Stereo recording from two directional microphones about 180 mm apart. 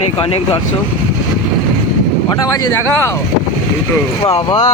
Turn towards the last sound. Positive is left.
turn(degrees=25)  # may be behind; listen again after turning